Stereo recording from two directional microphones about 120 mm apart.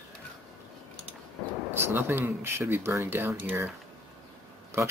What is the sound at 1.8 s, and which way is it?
Speech, 20° right (ahead or behind).